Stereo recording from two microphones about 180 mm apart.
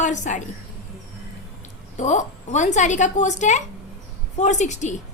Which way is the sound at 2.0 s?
40° left (ahead or behind).